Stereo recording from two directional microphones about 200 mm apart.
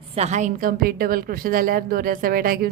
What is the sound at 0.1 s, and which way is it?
A woman's voice, 35° right (ahead or behind).